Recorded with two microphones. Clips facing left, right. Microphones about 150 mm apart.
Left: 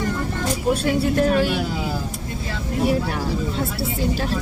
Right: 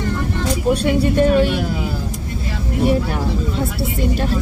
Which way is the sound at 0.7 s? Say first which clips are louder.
Right 3 dB; centre (ahead or behind).